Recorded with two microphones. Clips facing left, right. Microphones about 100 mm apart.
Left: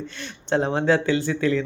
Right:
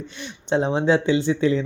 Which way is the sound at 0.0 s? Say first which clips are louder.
Even; 15° right (ahead or behind).